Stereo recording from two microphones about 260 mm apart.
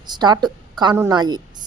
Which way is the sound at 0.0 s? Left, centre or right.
Centre.